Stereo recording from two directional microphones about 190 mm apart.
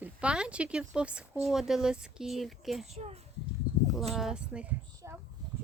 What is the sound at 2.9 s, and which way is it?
Speech, 35° right (ahead or behind).